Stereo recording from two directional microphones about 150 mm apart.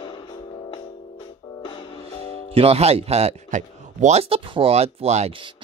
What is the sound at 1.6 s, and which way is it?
Music, 35° left (ahead or behind).